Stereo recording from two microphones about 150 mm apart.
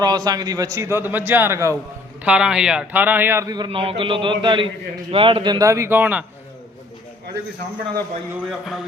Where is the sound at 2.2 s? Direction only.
5° right (ahead or behind).